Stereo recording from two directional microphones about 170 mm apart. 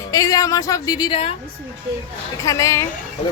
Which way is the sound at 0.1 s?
20° left (ahead or behind).